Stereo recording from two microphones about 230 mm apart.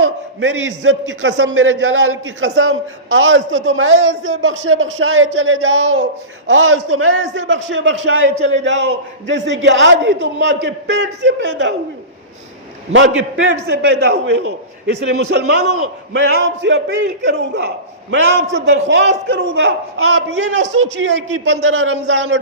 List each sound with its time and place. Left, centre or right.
0.0 s a man's voice: right
12.9 s a man's voice: right
18.9 s a man's voice: right